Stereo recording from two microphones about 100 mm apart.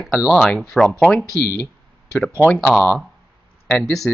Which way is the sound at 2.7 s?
5° left (ahead or behind).